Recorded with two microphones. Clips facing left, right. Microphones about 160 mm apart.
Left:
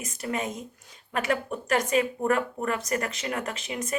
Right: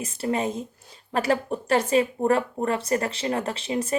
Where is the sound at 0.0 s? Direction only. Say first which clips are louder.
Right 5 dB; 30° right (ahead or behind).